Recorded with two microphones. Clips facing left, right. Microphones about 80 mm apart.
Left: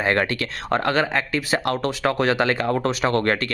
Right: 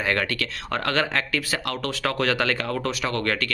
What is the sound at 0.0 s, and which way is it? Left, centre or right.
Speech, left.